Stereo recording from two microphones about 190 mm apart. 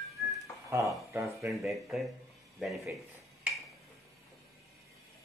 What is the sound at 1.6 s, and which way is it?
Speech, centre (ahead or behind).